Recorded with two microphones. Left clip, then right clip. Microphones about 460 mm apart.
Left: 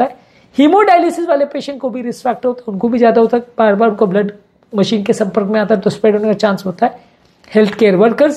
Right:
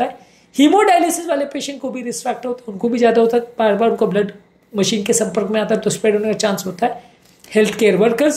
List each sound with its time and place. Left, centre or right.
0.6 s a woman's voice: left